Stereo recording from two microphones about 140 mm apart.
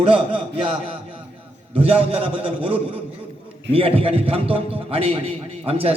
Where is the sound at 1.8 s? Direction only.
40° right (ahead or behind).